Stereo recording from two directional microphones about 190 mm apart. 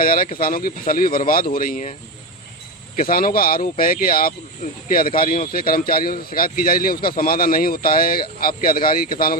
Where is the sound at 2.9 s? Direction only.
50° left (ahead or behind).